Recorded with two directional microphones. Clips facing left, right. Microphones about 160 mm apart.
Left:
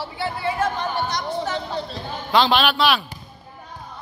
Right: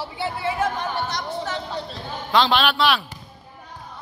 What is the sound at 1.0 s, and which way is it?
Chatter, centre (ahead or behind).